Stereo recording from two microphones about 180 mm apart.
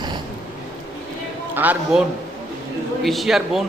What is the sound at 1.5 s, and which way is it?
Speech, 10° right (ahead or behind).